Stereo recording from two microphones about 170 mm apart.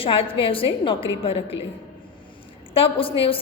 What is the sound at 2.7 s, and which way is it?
Speech, 30° left (ahead or behind).